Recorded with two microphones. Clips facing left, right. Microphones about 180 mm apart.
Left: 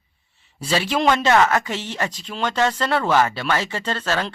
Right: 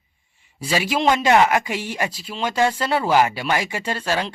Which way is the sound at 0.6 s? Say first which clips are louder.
Even; 10° right (ahead or behind).